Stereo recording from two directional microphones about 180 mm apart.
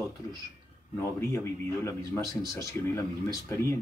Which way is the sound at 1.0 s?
15° left (ahead or behind).